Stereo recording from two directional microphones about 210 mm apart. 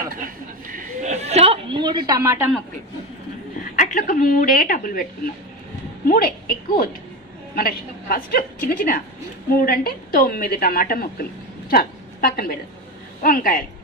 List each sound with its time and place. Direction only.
0.2 s a sound: 40° right (ahead or behind); by 2.5 s 10° right (ahead or behind)
3.7 s a woman's voice: 40° left (ahead or behind)
7.5 s a woman's voice: 45° left (ahead or behind)